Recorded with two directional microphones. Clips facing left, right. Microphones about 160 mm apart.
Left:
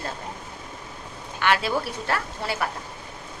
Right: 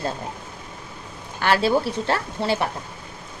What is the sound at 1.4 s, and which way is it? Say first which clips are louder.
Speech: right 4 dB; 30° right (ahead or behind).